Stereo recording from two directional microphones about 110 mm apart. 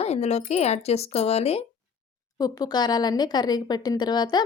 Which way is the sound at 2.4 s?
35° left (ahead or behind).